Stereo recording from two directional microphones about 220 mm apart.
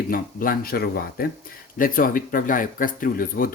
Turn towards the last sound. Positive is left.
turn(degrees=40)  # may be behind; listen again after turning